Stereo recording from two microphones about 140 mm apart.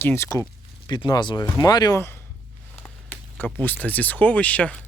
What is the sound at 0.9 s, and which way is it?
Speech, 30° left (ahead or behind).